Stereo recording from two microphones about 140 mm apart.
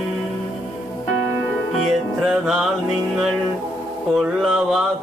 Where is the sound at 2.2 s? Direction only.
Centre (ahead or behind).